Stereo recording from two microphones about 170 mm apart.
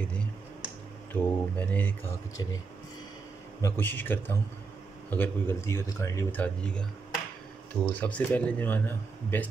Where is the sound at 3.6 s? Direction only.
10° left (ahead or behind).